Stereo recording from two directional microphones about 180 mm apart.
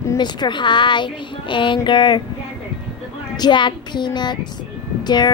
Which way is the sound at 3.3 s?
25° left (ahead or behind).